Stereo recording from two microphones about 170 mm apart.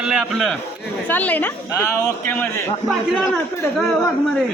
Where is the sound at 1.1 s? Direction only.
10° left (ahead or behind).